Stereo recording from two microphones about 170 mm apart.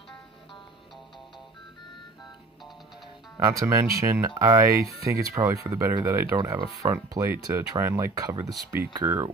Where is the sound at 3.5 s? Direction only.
15° right (ahead or behind).